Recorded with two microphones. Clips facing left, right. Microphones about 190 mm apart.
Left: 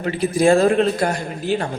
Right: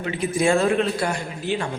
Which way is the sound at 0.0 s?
35° left (ahead or behind).